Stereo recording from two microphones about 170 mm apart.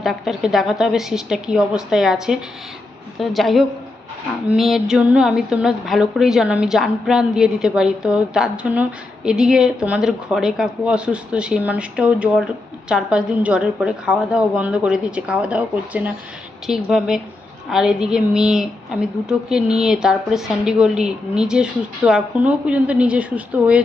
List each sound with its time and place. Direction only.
0.0 s a woman's voice: centre (ahead or behind)